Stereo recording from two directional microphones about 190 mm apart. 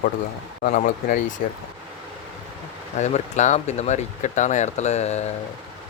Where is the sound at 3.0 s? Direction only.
40° left (ahead or behind).